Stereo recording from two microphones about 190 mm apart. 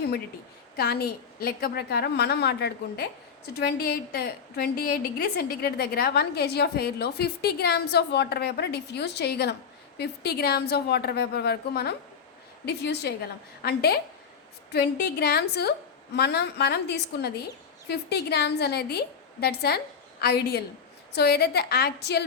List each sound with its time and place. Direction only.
0.8 s a woman's voice: 55° left (ahead or behind)